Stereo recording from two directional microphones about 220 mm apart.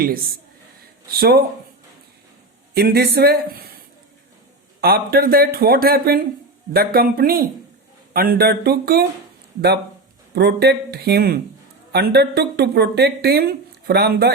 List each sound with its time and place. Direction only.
1.1 s speech: 45° right (ahead or behind)
2.7 s speech: 45° right (ahead or behind)
4.8 s speech: 45° right (ahead or behind)
10.3 s speech: 50° right (ahead or behind)